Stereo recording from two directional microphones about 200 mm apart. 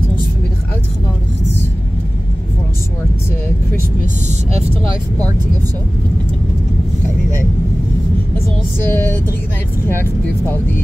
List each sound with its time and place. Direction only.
4.3 s vehicle: 30° right (ahead or behind)
8.8 s speech: 10° left (ahead or behind)